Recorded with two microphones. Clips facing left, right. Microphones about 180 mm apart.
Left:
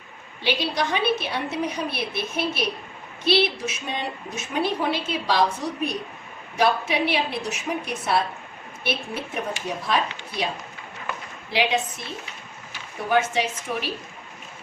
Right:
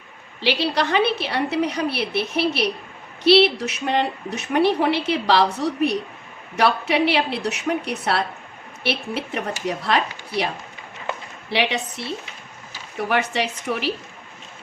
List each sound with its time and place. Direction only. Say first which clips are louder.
0.4 s a woman's voice: right 3 dB; 65° right (ahead or behind)